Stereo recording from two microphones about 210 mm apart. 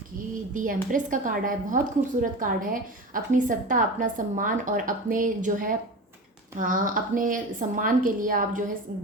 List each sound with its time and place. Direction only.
0.5 s a woman's voice: 40° right (ahead or behind)